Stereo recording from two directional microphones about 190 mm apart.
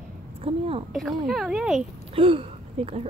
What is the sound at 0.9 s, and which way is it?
Speech, centre (ahead or behind).